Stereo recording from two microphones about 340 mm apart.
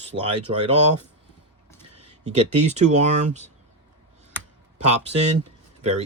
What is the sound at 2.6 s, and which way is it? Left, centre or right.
Speech, centre.